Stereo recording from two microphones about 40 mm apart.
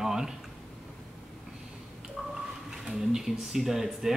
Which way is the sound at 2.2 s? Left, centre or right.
Centre.